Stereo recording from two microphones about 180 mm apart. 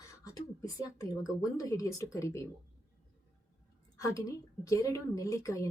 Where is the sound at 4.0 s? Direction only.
20° left (ahead or behind).